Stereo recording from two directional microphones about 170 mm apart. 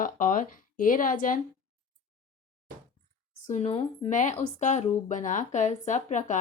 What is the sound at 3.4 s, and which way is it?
Speech, 40° left (ahead or behind).